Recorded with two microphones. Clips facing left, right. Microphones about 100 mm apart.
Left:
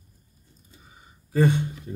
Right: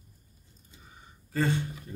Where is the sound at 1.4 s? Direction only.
20° left (ahead or behind).